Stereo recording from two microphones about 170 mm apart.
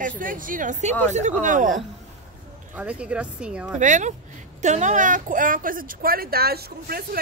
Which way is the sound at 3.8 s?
45° right (ahead or behind).